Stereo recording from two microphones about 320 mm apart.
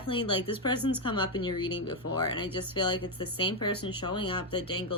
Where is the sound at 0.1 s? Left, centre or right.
Centre.